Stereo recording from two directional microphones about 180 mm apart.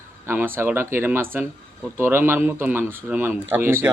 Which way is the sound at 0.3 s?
10° right (ahead or behind).